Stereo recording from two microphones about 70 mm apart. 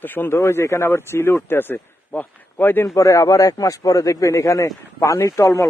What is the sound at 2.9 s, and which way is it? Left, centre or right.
A man's voice, left.